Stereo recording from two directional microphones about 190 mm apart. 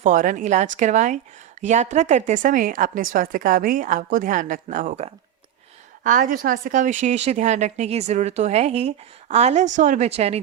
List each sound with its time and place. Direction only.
0.0 s a woman's voice: 45° right (ahead or behind)